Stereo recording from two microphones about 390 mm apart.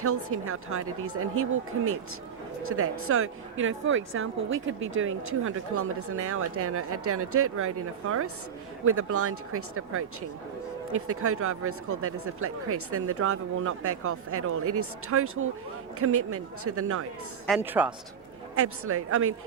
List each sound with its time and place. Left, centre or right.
0.0 s a woman's voice: right
8.8 s a woman's voice: right
17.4 s a woman's voice: centre
18.5 s a woman's voice: right